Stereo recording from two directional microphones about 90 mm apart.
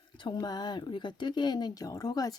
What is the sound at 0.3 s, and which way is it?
Speech, 50° left (ahead or behind).